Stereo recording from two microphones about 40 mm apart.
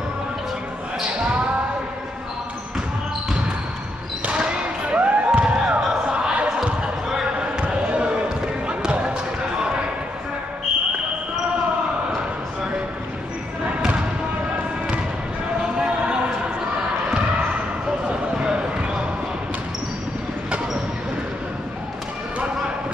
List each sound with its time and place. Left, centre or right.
1.0 s basketball bounce: right
4.5 s music: right
6.0 s basketball bounce: right
7.6 s basketball bounce: right
15.6 s a sound: right
18.4 s basketball bounce: right